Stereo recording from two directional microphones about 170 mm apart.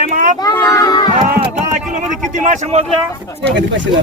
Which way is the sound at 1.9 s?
45° right (ahead or behind).